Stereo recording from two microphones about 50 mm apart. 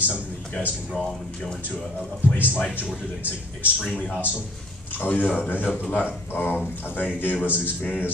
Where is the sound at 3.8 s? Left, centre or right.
Left.